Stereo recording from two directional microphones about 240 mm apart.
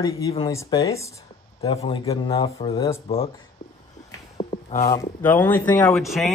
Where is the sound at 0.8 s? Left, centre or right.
Centre.